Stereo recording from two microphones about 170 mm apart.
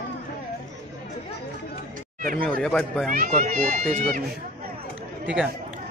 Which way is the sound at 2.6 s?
5° left (ahead or behind).